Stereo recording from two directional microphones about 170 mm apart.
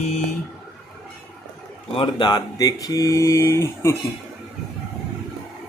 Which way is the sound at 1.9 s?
25° left (ahead or behind).